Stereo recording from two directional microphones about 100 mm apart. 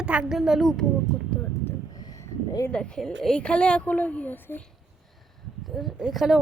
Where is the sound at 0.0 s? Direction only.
10° right (ahead or behind).